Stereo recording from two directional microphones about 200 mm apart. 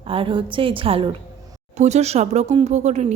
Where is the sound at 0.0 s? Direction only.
30° right (ahead or behind).